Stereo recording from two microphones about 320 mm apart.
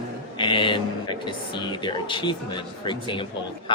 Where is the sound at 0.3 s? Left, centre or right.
Centre.